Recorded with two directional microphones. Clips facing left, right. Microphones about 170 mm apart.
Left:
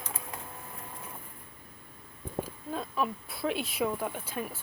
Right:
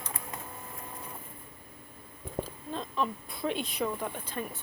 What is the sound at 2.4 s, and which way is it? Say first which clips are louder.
Speech: left 1 dB; 10° left (ahead or behind).